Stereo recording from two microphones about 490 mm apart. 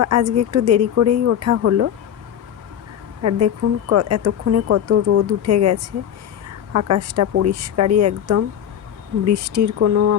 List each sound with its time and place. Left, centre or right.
0.0 s speech: right
3.2 s speech: right